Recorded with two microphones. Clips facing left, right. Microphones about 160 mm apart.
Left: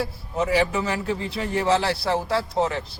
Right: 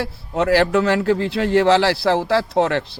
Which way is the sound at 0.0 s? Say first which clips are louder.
Right 4 dB; 75° right (ahead or behind).